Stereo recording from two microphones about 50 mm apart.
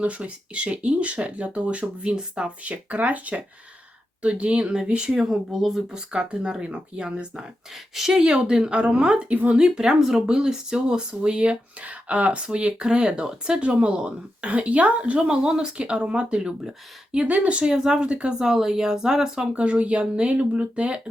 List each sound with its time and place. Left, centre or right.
0.0 s speech: right
5.0 s speech: centre
6.1 s speech: centre
7.9 s speech: centre; by 17.6 s right
17.6 s speech: centre
19.5 s speech: right